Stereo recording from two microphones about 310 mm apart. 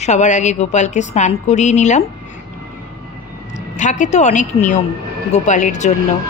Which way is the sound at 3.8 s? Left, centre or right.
Left.